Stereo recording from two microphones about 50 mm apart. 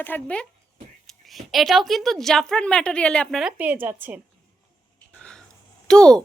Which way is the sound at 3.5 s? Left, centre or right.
Right.